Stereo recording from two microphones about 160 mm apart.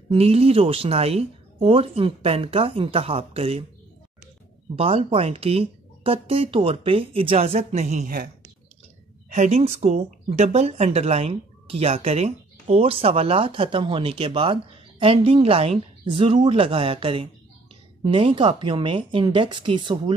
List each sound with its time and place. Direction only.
0.1 s speech: 40° right (ahead or behind)
4.7 s speech: 35° right (ahead or behind); by 8.3 s 55° right (ahead or behind)
9.3 s speech: 45° right (ahead or behind); by 20.2 s 30° right (ahead or behind)